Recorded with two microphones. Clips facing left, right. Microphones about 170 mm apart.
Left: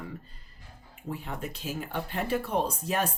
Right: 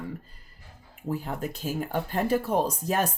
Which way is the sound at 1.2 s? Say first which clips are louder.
Right 4 dB; 45° right (ahead or behind).